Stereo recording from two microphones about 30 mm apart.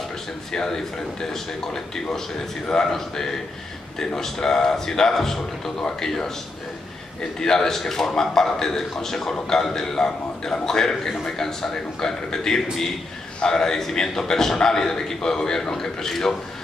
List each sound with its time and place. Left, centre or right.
0.5 s a man's voice: centre
2.7 s a man's voice: centre
7.3 s a man's voice: centre